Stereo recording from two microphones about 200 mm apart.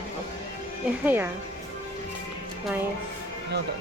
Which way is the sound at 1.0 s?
10° right (ahead or behind).